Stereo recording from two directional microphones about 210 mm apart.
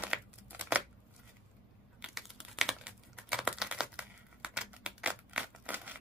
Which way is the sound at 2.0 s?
Centre (ahead or behind).